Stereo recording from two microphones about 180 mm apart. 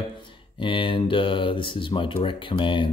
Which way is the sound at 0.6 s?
30° left (ahead or behind).